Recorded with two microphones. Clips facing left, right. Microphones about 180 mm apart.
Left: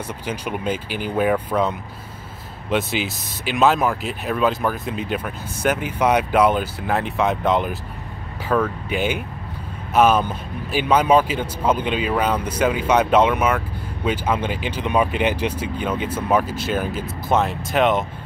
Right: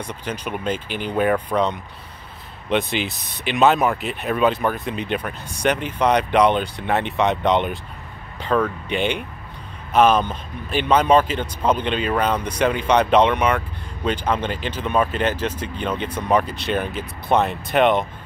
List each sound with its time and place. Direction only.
0.0 s speech: 10° left (ahead or behind)